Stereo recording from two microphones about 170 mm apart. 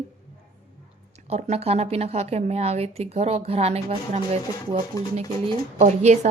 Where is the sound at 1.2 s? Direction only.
40° right (ahead or behind).